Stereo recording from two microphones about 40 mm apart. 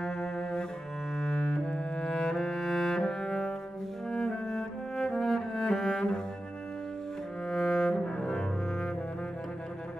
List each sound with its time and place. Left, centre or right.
0.0 s cello: centre
1.1 s double bass: left
2.0 s music: centre
7.4 s cello: centre
8.2 s double bass: centre